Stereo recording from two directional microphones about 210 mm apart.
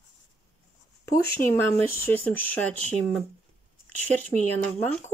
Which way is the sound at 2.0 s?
10° left (ahead or behind).